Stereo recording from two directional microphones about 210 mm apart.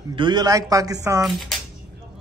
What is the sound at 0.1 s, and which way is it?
A man's voice, 20° right (ahead or behind).